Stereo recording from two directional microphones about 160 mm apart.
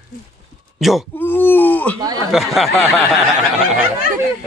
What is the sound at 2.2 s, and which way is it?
Speech, centre (ahead or behind).